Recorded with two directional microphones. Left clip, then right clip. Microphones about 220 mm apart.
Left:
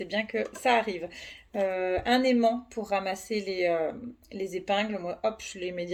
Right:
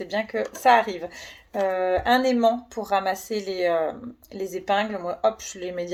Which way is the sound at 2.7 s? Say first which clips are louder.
Right 6 dB; 25° right (ahead or behind).